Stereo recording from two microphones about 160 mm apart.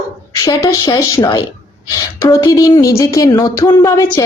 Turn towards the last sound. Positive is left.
turn(degrees=20)  # may be behind; listen again after turning